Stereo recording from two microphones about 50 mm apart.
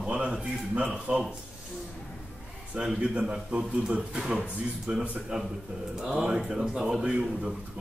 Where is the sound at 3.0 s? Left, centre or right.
Right.